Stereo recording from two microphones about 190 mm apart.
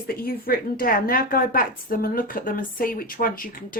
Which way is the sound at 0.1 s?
50° left (ahead or behind).